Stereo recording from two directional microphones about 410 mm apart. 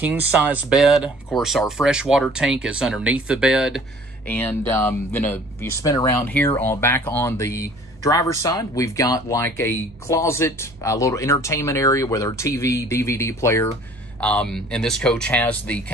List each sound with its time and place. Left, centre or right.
0.0 s speech: centre